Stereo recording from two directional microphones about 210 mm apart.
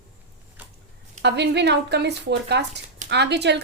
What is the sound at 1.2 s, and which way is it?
Speech, 55° right (ahead or behind).